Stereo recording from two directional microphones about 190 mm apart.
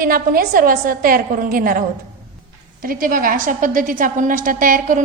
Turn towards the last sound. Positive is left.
turn(degrees=-45)  # may be behind; listen again after turning